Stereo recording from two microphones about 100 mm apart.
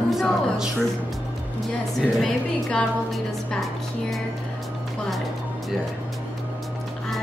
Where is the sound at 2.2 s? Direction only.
5° left (ahead or behind).